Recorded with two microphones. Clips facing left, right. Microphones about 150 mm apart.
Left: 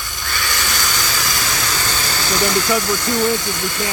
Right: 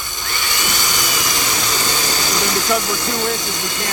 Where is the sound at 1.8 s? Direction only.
15° right (ahead or behind).